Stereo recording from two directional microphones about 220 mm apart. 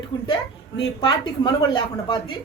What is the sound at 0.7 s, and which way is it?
A woman's voice, 20° left (ahead or behind).